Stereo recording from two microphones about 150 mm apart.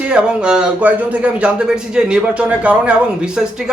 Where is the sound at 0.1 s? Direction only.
5° right (ahead or behind).